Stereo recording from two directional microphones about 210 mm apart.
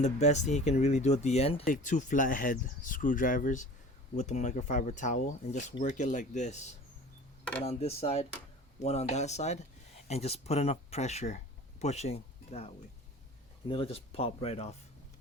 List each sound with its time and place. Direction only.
0.0 s speech: 35° left (ahead or behind)
7.6 s speech: 30° left (ahead or behind)